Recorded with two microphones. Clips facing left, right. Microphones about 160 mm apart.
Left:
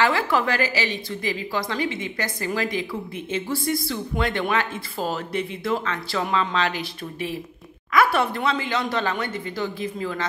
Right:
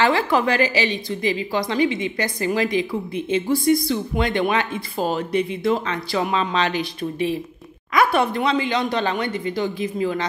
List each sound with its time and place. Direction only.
0.0 s a woman's voice: 20° right (ahead or behind)